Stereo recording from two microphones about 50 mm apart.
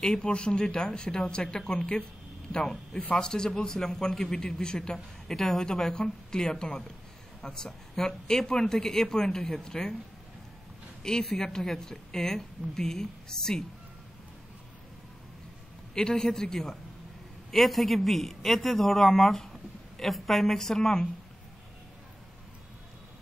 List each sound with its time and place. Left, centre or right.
0.0 s a man's voice: centre
11.0 s a man's voice: centre
15.9 s a man's voice: centre